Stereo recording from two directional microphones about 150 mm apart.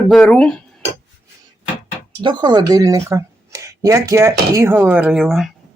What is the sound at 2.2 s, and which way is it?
Speech, 30° right (ahead or behind).